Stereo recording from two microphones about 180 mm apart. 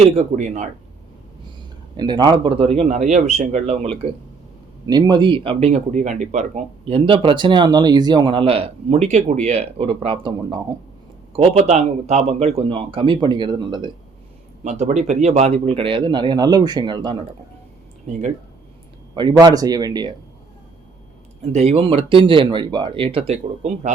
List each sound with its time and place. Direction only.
0.0 s speech: 40° right (ahead or behind)
2.0 s speech: 25° right (ahead or behind)
4.9 s speech: 25° right (ahead or behind)
11.3 s speech: 35° right (ahead or behind)
14.6 s speech: 40° right (ahead or behind); by 17.2 s 25° right (ahead or behind)
18.1 s speech: 40° right (ahead or behind)
19.1 s speech: 25° right (ahead or behind)
21.5 s speech: 35° right (ahead or behind)